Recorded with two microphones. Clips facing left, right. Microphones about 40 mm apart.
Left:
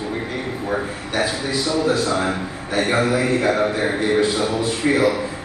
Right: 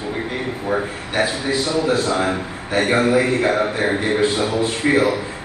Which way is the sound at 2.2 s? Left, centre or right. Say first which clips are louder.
Right 1 dB; centre.